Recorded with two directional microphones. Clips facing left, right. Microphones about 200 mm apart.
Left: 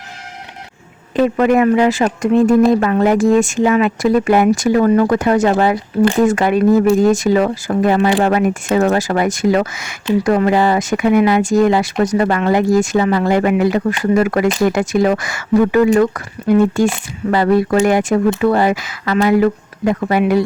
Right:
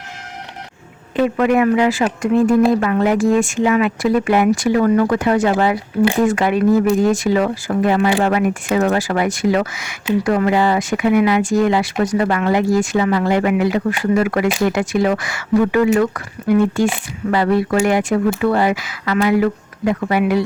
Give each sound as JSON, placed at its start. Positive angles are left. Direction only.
{"t": 1.1, "sound": "speech", "side_deg": 40}